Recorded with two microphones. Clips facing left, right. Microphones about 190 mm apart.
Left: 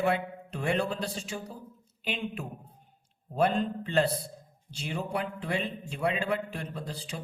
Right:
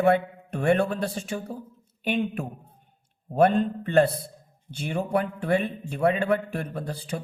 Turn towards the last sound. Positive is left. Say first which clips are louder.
# right 6 dB
turn(degrees=-60)  # may be behind; listen again after turning